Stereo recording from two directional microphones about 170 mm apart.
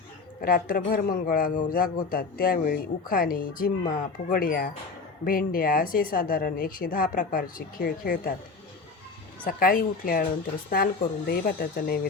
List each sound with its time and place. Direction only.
0.4 s speech: 55° left (ahead or behind)
9.4 s speech: 55° left (ahead or behind)
11.3 s speech: 60° left (ahead or behind)